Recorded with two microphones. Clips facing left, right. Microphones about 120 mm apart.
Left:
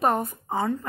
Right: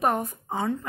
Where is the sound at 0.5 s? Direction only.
5° left (ahead or behind).